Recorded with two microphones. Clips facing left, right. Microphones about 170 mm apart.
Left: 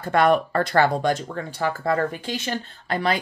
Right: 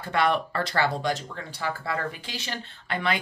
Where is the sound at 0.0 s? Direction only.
45° left (ahead or behind).